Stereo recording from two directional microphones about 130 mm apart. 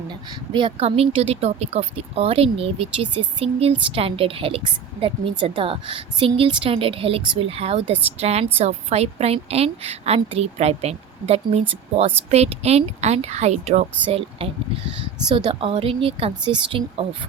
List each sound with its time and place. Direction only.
0.5 s speech: 45° right (ahead or behind); by 13.8 s 60° right (ahead or behind)
14.1 s speech: 50° right (ahead or behind)
15.3 s speech: 35° right (ahead or behind)